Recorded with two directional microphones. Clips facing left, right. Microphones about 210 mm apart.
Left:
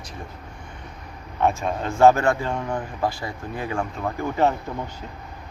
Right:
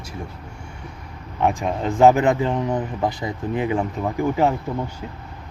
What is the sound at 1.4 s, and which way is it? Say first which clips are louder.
Speech: right 1 dB; 15° right (ahead or behind).